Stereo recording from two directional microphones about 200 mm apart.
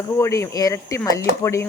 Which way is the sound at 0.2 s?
15° left (ahead or behind).